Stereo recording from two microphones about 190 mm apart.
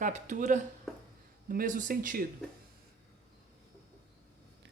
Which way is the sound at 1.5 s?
45° right (ahead or behind).